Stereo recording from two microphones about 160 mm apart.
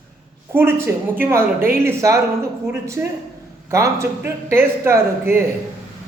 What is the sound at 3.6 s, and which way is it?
Speech, 15° right (ahead or behind).